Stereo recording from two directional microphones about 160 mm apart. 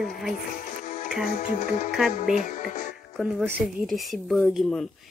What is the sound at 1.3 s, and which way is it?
Speech, 50° left (ahead or behind).